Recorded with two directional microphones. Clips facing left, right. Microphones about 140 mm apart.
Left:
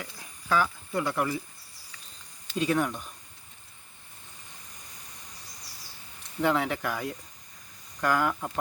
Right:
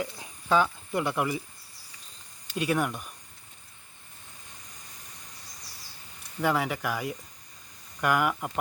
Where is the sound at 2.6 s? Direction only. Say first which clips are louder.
Left 1 dB; 10° right (ahead or behind).